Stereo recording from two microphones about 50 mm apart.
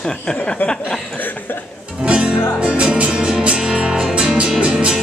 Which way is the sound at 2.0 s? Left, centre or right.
Centre.